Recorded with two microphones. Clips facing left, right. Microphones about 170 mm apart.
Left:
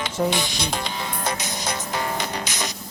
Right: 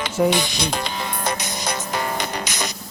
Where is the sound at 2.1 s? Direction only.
70° right (ahead or behind).